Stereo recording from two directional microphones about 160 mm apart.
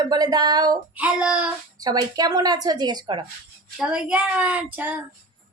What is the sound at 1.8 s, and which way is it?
Speech, 25° right (ahead or behind).